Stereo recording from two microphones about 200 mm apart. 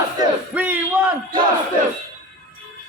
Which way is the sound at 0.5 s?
5° right (ahead or behind).